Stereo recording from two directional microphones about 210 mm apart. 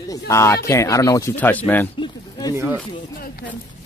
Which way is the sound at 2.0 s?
15° left (ahead or behind).